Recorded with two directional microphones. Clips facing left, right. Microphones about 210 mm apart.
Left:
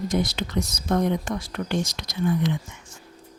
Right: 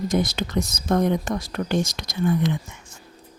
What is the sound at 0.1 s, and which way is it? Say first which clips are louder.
Speech: right 2 dB; 45° right (ahead or behind).